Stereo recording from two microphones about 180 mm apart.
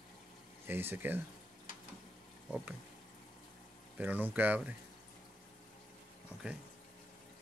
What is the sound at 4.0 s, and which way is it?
Speech, 10° right (ahead or behind).